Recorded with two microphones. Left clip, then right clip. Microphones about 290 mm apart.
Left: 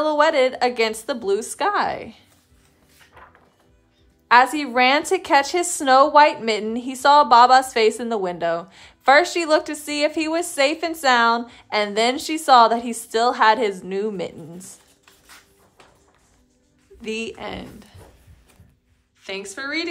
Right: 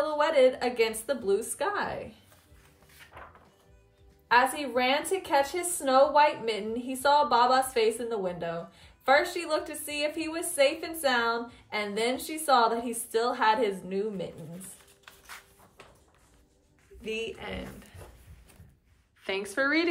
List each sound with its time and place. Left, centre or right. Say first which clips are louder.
0.0 s a woman's voice: left 6 dB; centre
4.3 s speech: left 9 dB; centre
17.0 s a woman's voice: left 6 dB; centre
19.2 s a woman's voice: right 1 dB; centre